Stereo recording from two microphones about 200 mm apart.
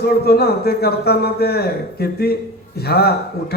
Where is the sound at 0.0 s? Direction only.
50° left (ahead or behind).